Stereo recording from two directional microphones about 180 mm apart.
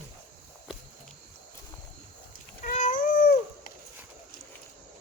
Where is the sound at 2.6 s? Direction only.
40° left (ahead or behind).